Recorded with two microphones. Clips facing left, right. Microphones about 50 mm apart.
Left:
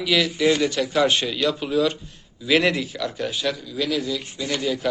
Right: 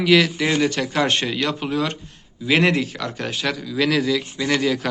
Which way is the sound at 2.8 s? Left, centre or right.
Right.